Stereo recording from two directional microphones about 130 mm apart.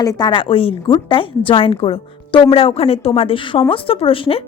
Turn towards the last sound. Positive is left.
turn(degrees=45)  # may be behind; listen again after turning